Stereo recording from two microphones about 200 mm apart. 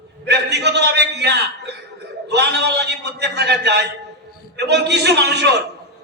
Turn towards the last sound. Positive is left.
turn(degrees=-55)  # may be behind; listen again after turning